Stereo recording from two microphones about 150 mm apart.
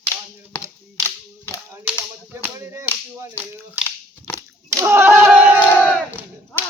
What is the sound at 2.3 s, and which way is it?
Clapping, 15° right (ahead or behind).